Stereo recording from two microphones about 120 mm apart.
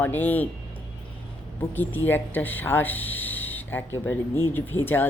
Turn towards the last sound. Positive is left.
turn(degrees=15)  # may be behind; listen again after turning